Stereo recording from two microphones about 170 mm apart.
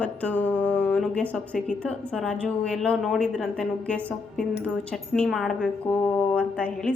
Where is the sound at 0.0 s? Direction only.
10° left (ahead or behind).